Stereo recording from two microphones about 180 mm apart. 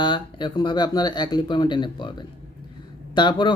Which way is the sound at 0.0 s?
25° left (ahead or behind).